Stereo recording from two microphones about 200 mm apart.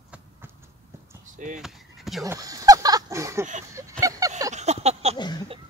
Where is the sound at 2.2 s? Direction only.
15° right (ahead or behind).